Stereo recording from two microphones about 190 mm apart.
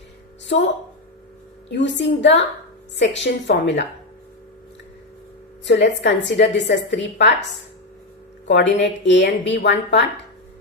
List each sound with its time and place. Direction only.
1.7 s a woman's voice: 70° left (ahead or behind)
5.6 s a woman's voice: 70° left (ahead or behind)
8.4 s a woman's voice: 70° left (ahead or behind)